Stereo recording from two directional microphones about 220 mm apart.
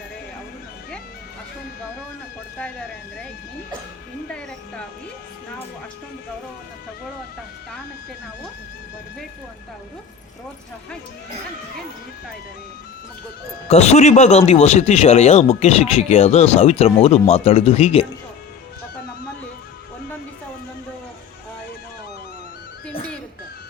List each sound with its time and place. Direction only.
4.3 s speech: 5° left (ahead or behind)
13.7 s speech: 30° left (ahead or behind)